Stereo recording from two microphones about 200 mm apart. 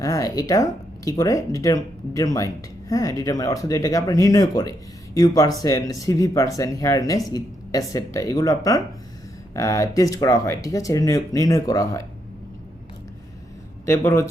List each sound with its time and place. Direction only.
0.0 s speech: 15° left (ahead or behind)
13.8 s speech: 15° left (ahead or behind)